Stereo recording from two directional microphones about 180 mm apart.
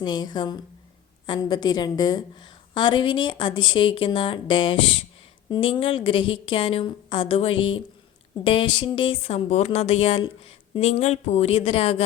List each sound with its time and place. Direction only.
0.0 s a woman's voice: 25° left (ahead or behind)